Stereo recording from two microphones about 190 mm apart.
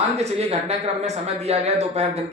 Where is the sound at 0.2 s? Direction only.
35° right (ahead or behind).